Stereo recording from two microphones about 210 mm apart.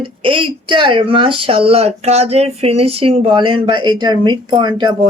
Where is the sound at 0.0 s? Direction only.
25° right (ahead or behind).